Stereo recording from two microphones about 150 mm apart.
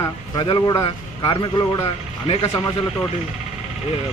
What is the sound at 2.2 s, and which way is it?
Speech, 40° left (ahead or behind).